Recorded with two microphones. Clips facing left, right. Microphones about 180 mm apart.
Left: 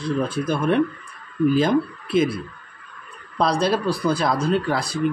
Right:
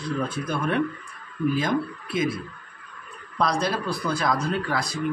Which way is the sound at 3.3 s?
30° left (ahead or behind).